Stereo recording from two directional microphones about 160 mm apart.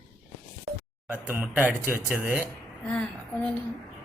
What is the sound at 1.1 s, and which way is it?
Speech, 10° right (ahead or behind).